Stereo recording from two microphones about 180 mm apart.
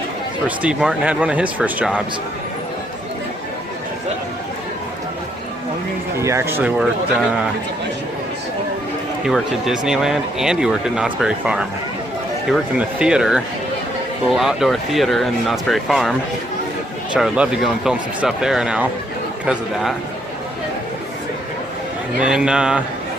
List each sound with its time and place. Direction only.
0.4 s speech: 5° right (ahead or behind)
6.1 s speech: 15° right (ahead or behind)
9.2 s speech: centre (ahead or behind)
17.2 s speech: 5° right (ahead or behind)
22.2 s speech: 5° right (ahead or behind)